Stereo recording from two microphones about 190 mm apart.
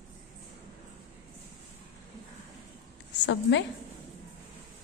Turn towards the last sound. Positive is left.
turn(degrees=70)  # may be behind; listen again after turning